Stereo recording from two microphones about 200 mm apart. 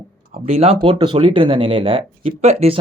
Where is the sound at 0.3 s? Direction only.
30° right (ahead or behind).